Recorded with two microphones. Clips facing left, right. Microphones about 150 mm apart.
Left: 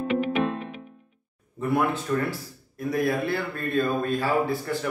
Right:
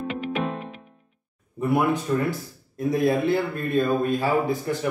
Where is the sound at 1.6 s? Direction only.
15° right (ahead or behind).